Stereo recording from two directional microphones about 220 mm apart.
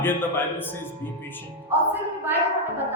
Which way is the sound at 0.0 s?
10° left (ahead or behind).